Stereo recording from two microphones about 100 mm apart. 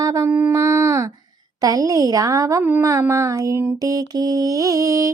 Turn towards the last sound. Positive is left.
turn(degrees=-35)  # may be behind; listen again after turning